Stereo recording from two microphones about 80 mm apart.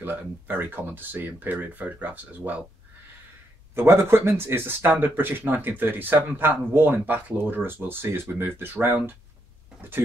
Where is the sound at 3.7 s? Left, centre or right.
Right.